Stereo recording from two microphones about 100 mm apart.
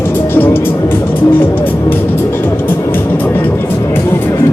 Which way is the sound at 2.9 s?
20° left (ahead or behind).